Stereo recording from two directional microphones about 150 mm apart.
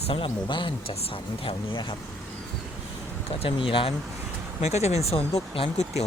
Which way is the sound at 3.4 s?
35° left (ahead or behind).